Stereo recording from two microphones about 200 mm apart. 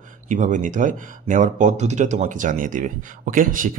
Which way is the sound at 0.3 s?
40° right (ahead or behind).